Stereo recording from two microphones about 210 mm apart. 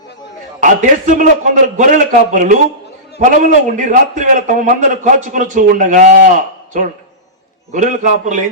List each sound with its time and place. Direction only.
0.6 s a man's voice: 40° right (ahead or behind)